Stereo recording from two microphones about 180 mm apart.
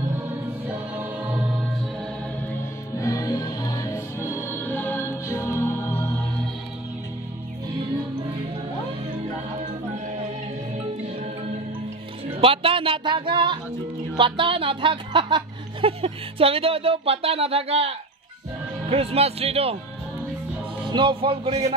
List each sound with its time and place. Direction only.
0.7 s choir: 10° right (ahead or behind)
3.0 s music: 20° left (ahead or behind)
12.4 s a sound: 30° right (ahead or behind)
14.1 s speech: 30° right (ahead or behind)
20.8 s speech: 25° right (ahead or behind)